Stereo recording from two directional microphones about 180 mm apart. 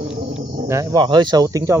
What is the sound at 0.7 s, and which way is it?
Speech, 15° right (ahead or behind).